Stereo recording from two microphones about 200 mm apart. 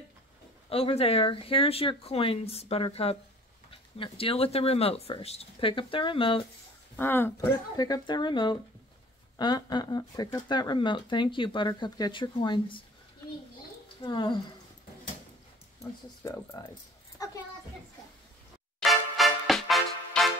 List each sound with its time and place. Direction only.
0.7 s speech: 30° left (ahead or behind)
7.0 s speech: 10° left (ahead or behind)
14.0 s speech: 25° left (ahead or behind)
16.5 s a child's voice: 20° left (ahead or behind)
18.8 s music: centre (ahead or behind)